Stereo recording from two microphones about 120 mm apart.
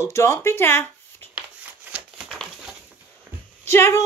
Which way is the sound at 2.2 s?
Centre (ahead or behind).